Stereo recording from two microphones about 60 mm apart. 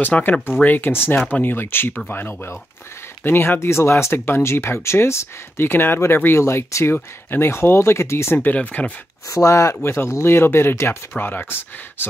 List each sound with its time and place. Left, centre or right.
0.0 s speech: left
8.5 s speech: left
9.3 s speech: left
9.8 s speech: left